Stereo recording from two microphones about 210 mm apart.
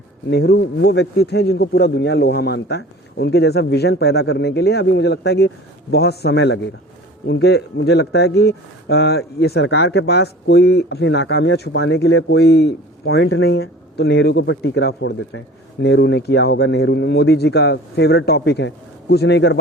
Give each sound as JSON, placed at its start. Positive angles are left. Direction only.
{"t": 0.3, "sound": "speech", "side_deg": 50}